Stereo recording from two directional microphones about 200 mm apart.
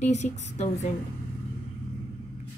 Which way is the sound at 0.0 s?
35° left (ahead or behind).